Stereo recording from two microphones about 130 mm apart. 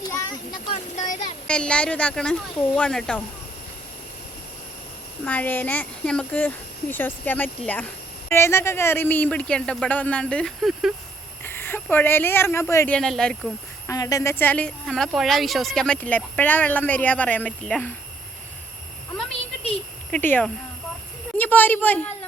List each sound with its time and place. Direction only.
0.0 s a sound: 25° left (ahead or behind)
0.7 s a sound: 65° left (ahead or behind)
1.5 s speech: 10° left (ahead or behind)
5.2 s speech: 10° left (ahead or behind)
11.4 s speech: 15° left (ahead or behind)
13.0 s speech: 5° left (ahead or behind)
13.8 s speech: 25° left (ahead or behind); by 17.9 s 10° left (ahead or behind)
20.1 s speech: 10° left (ahead or behind)